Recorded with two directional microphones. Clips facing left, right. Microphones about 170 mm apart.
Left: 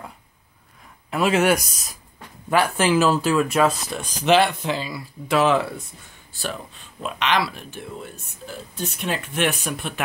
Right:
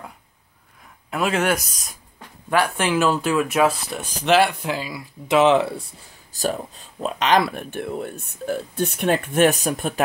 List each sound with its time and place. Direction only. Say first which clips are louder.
1.1 s speech: left 2 dB; 5° left (ahead or behind); by 5.7 s 20° right (ahead or behind)
6.3 s speech: right 6 dB; 40° right (ahead or behind)